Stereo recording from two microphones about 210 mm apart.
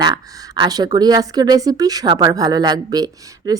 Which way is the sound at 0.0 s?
15° right (ahead or behind).